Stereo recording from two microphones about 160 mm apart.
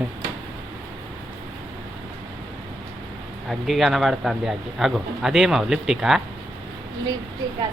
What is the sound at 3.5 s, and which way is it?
Speech, centre (ahead or behind).